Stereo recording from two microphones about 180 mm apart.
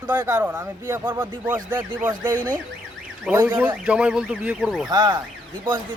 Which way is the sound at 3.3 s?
10° right (ahead or behind).